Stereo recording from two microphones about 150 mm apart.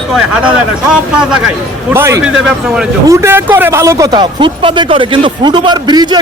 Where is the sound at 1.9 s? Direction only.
20° right (ahead or behind).